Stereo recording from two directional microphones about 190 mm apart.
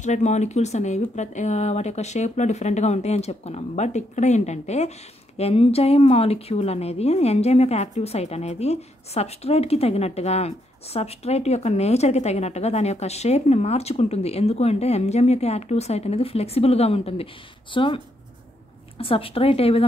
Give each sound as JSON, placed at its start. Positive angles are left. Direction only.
{"t": 0.0, "sound": "a woman's voice", "side_deg": 35}